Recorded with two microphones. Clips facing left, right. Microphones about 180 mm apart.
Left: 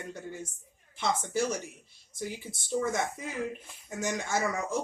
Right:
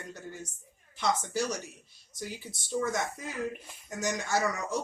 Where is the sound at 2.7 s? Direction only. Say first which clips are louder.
Left 1 dB; 25° left (ahead or behind).